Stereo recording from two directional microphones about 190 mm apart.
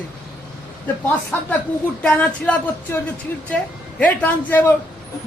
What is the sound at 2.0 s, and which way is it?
A man's voice, 5° left (ahead or behind).